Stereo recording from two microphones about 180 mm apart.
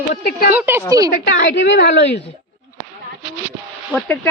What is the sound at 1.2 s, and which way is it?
A woman's voice, 75° left (ahead or behind).